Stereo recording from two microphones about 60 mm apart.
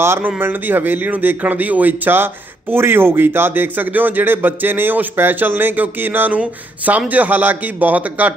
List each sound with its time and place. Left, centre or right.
0.0 s speech: right
0.3 s speech: right